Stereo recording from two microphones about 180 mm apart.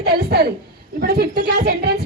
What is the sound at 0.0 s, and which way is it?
Speech, 60° right (ahead or behind).